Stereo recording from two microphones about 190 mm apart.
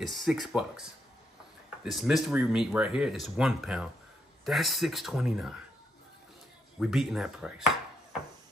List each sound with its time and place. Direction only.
0.0 s speech: centre (ahead or behind)
6.8 s speech: centre (ahead or behind)